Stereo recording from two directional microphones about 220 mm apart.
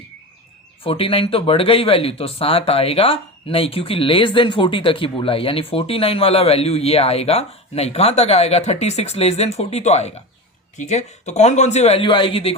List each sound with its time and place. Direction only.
0.9 s speech: 25° left (ahead or behind)